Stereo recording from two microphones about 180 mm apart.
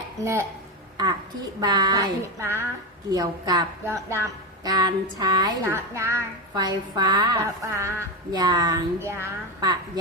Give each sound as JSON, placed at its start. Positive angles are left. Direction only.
{"t": 1.6, "sound": "a woman's voice", "side_deg": -20}